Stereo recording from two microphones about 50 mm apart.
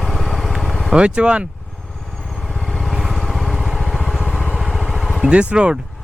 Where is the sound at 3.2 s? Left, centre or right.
Centre.